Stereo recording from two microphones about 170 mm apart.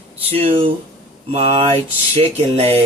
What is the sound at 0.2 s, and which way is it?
Speech, 35° right (ahead or behind).